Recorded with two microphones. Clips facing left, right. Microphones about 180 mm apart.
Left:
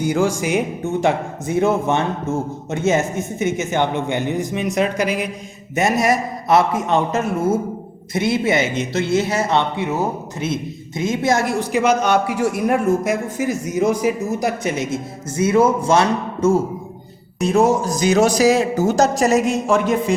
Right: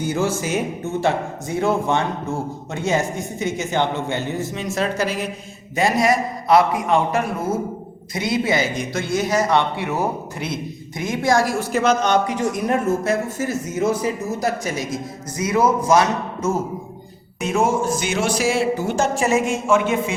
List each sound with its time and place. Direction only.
0.0 s a man's voice: 15° left (ahead or behind); by 20.1 s 40° left (ahead or behind)